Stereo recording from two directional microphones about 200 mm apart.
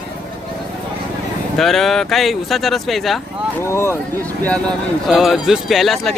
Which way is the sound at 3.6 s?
10° left (ahead or behind).